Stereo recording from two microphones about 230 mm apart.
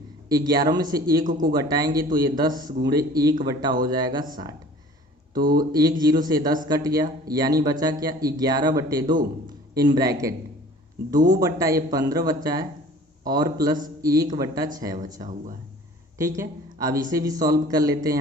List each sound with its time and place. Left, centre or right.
0.3 s speech: centre
1.2 s speech: right
1.5 s speech: centre
5.4 s speech: right
5.7 s speech: centre
11.3 s speech: centre
16.1 s speech: centre